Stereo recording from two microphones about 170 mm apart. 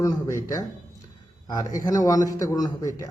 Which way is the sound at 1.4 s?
20° left (ahead or behind).